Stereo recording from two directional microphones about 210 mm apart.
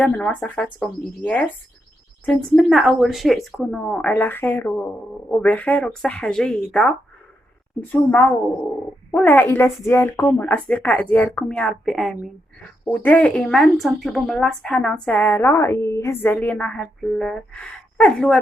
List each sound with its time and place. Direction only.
0.0 s speech: 5° left (ahead or behind)